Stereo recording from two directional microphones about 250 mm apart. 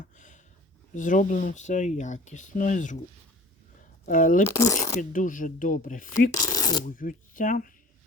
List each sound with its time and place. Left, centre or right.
0.9 s speech: left
4.0 s speech: left
4.5 s speech: centre
4.9 s speech: left
6.3 s speech: centre
6.8 s speech: left